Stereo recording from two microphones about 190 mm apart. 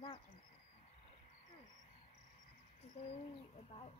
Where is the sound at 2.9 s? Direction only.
30° left (ahead or behind).